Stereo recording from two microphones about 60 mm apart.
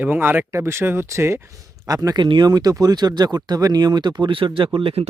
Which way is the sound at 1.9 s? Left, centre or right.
Right.